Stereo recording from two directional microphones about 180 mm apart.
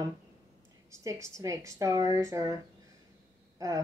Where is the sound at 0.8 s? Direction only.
15° right (ahead or behind).